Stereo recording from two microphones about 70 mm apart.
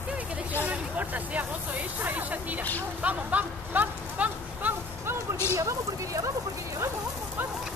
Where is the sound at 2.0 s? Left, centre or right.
Right.